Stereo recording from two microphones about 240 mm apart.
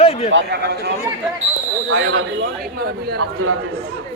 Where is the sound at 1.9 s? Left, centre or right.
Right.